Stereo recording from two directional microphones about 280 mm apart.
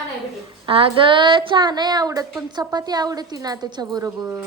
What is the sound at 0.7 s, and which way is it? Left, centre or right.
A woman's voice, centre.